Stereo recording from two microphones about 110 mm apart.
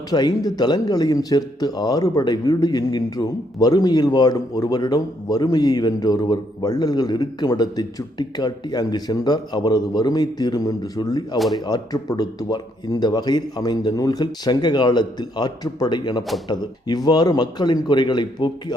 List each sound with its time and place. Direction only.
0.1 s speech: 40° left (ahead or behind)